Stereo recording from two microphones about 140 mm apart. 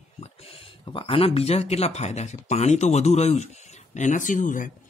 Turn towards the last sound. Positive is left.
turn(degrees=70)  # may be behind; listen again after turning